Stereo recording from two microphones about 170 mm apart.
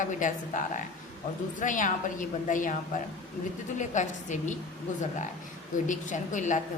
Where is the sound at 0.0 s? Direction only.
50° left (ahead or behind).